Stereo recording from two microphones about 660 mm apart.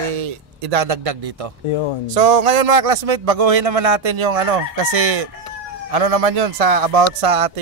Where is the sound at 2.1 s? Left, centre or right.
Right.